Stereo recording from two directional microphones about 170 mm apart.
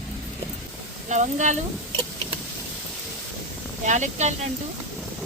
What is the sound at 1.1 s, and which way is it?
Speech, 45° right (ahead or behind).